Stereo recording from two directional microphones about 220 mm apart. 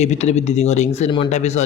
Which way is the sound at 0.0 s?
30° left (ahead or behind).